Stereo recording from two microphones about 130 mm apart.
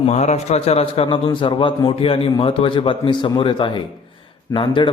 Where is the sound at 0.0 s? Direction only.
60° left (ahead or behind).